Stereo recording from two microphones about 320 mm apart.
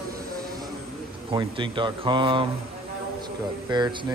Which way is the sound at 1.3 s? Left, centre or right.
Centre.